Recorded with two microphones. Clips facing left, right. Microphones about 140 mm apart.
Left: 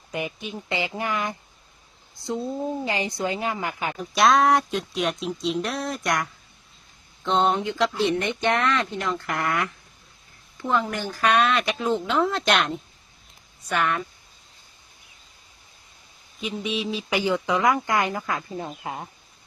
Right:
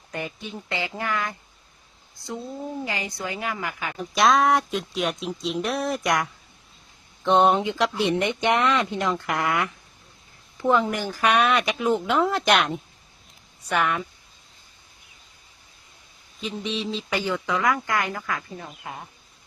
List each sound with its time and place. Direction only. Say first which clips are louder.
0.1 s speech: left 2 dB; 15° left (ahead or behind)
4.1 s speech: left 1 dB; centre (ahead or behind)
7.3 s speech: right 3 dB; 15° right (ahead or behind)
16.4 s speech: left 1 dB; 10° left (ahead or behind); by 19.0 s 30° left (ahead or behind)